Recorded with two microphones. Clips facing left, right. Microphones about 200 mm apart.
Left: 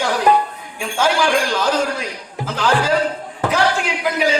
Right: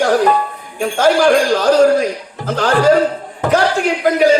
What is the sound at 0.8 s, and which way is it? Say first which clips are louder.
Speech: right 6 dB; 50° right (ahead or behind).